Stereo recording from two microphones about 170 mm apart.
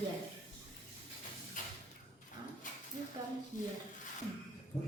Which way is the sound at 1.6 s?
50° left (ahead or behind).